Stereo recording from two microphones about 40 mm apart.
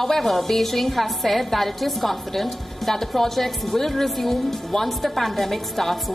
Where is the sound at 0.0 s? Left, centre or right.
Centre.